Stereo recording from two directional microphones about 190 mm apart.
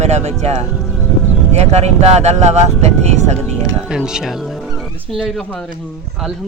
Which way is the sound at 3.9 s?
5° right (ahead or behind).